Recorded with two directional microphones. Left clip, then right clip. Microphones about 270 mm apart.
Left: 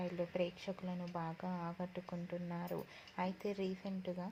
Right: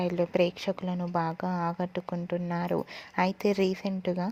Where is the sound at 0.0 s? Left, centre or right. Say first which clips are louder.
Right 13 dB; right.